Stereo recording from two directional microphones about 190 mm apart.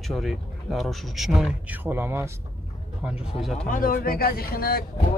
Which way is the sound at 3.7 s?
50° left (ahead or behind).